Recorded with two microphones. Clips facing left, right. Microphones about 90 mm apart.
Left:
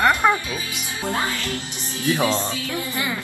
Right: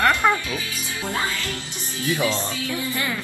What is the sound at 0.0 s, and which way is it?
Speech, 20° left (ahead or behind).